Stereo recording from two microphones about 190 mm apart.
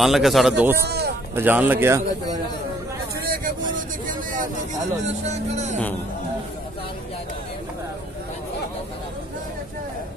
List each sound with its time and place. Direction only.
0.0 s a man's voice: centre (ahead or behind)
0.8 s speech: 60° right (ahead or behind)
1.3 s speech: 10° right (ahead or behind)
3.3 s a sound: 45° right (ahead or behind)